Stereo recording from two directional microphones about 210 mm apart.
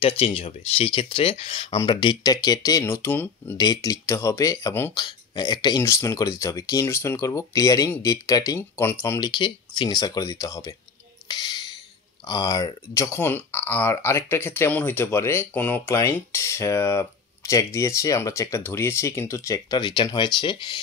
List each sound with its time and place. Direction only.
0.0 s speech: 25° left (ahead or behind)
11.2 s a sound: 20° left (ahead or behind)
12.3 s speech: 20° left (ahead or behind)